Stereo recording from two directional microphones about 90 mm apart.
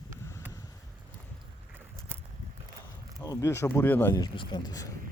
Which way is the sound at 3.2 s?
40° left (ahead or behind).